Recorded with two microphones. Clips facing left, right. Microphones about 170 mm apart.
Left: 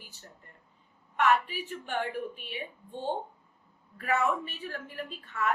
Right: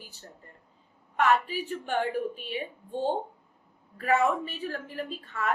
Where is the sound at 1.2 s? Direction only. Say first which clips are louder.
Right 2 dB; 35° right (ahead or behind).